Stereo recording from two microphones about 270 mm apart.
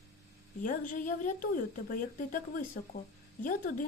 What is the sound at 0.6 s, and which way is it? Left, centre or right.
Speech, left.